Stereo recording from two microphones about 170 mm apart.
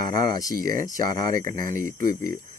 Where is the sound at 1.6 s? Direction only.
15° left (ahead or behind).